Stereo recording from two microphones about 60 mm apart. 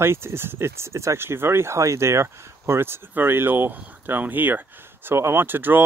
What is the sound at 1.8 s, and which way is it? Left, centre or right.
Speech, right.